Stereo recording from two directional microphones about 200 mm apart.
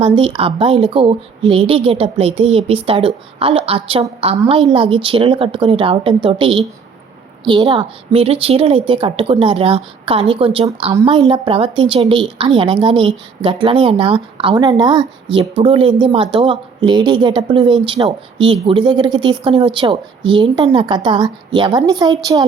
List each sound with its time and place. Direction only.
0.0 s a woman's voice: 25° right (ahead or behind)